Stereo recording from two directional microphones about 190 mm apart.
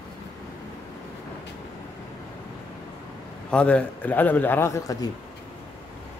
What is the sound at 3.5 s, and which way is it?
A man's voice, 5° left (ahead or behind).